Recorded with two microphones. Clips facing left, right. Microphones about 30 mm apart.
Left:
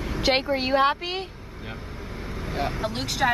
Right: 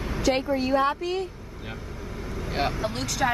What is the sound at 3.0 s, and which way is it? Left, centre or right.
Speech, left.